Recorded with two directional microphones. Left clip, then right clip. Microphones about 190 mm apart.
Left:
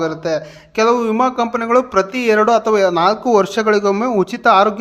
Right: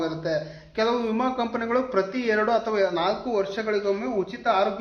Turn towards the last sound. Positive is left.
turn(degrees=40)  # may be behind; listen again after turning